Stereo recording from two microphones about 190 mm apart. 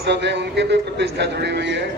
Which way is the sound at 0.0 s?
65° right (ahead or behind).